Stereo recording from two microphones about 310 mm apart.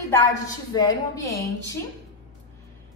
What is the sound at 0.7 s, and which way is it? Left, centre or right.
Speech, centre.